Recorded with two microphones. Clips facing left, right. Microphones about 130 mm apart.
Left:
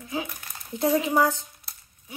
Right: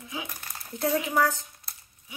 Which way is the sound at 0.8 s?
25° left (ahead or behind).